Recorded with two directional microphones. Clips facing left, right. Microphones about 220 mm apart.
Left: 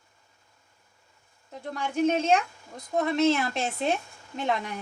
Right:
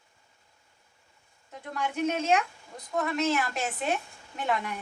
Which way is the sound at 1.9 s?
30° left (ahead or behind).